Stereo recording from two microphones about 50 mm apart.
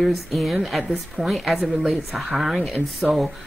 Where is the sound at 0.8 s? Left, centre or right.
Centre.